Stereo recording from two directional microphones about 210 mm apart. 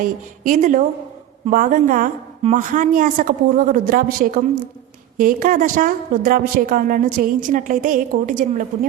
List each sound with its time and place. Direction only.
0.0 s a woman's voice: 40° right (ahead or behind)